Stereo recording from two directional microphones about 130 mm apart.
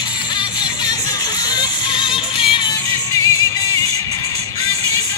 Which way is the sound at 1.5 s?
35° left (ahead or behind).